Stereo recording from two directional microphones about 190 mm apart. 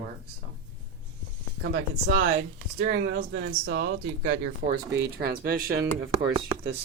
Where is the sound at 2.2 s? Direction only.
60° right (ahead or behind); by 4.5 s 90° right.